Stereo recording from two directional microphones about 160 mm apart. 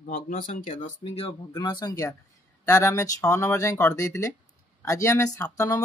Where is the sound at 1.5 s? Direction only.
25° left (ahead or behind).